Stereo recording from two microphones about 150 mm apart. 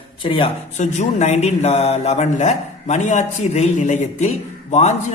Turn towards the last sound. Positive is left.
turn(degrees=50)  # may be behind; listen again after turning